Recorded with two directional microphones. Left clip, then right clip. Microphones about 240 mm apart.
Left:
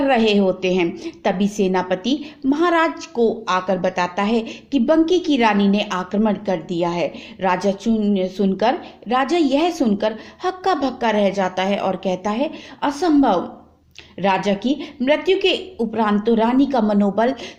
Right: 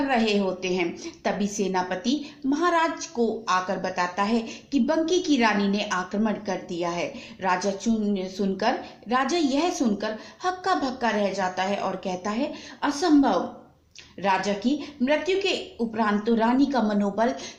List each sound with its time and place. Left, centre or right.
0.0 s a woman's voice: left